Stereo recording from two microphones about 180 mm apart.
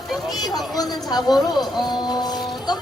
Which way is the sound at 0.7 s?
20° left (ahead or behind).